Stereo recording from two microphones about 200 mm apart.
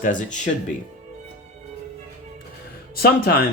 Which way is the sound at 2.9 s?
50° left (ahead or behind).